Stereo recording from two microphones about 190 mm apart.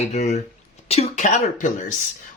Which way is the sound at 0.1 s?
35° left (ahead or behind).